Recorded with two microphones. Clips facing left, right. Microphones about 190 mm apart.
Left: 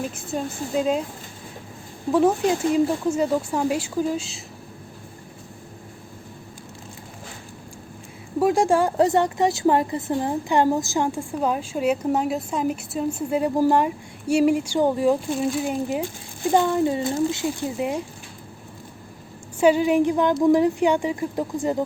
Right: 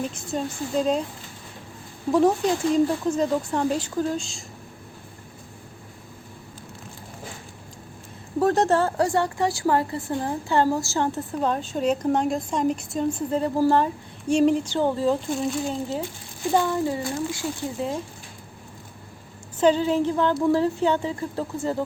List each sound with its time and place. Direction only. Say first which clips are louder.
0.0 s a woman's voice: even; 5° left (ahead or behind)
2.1 s a woman's voice: left 1 dB; 5° left (ahead or behind)
8.4 s a woman's voice: left 1 dB; 10° left (ahead or behind)
19.5 s a woman's voice: left 2 dB; 10° left (ahead or behind)